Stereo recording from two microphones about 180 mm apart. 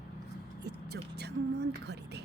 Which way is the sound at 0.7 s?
65° right (ahead or behind).